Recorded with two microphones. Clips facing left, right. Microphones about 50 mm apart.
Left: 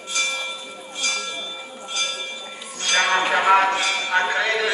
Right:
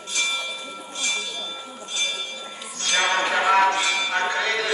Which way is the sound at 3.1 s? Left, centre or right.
Centre.